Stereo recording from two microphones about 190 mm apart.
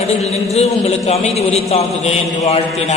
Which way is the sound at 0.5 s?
35° left (ahead or behind).